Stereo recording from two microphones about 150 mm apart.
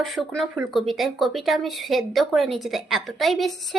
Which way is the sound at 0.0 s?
Centre (ahead or behind).